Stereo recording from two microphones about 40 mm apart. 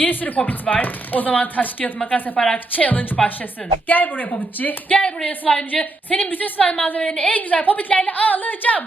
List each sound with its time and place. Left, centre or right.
0.0 s speech: left
2.3 s a woman's voice: left
2.7 s speech: left
4.9 s a woman's voice: left